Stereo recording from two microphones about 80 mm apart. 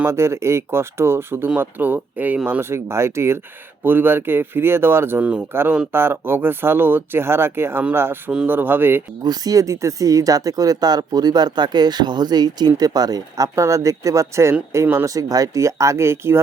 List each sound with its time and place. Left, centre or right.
0.0 s speech: right
2.6 s speech: right
9.2 s speech: right